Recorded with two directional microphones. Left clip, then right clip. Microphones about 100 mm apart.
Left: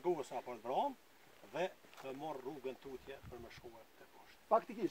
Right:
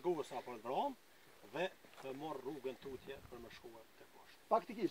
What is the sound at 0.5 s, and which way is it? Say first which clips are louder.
Speech: left 3 dB; 30° left (ahead or behind).